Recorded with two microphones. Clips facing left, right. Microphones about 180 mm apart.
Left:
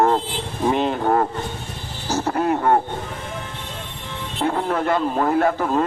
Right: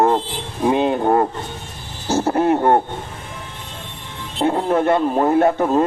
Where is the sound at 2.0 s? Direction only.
30° right (ahead or behind).